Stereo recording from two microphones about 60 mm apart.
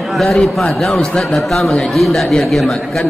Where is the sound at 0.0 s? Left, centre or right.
Centre.